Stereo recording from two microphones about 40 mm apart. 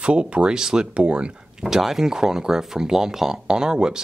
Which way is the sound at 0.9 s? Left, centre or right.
Right.